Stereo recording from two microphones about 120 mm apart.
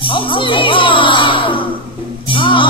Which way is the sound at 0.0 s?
45° left (ahead or behind).